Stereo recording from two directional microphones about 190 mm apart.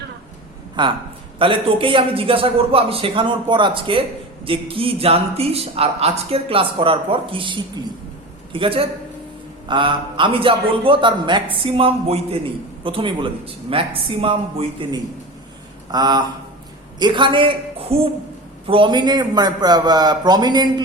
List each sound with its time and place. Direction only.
0.8 s speech: 25° right (ahead or behind)